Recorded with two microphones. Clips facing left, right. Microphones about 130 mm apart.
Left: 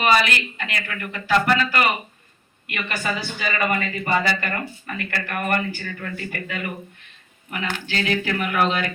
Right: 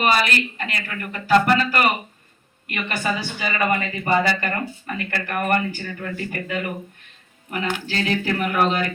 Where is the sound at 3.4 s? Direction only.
30° right (ahead or behind).